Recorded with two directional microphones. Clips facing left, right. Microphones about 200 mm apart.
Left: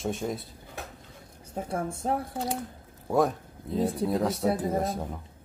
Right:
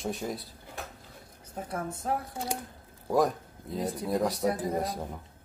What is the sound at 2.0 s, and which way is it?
Speech, 30° left (ahead or behind).